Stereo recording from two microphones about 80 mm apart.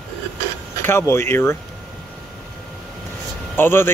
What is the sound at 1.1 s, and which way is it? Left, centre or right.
Speech, left.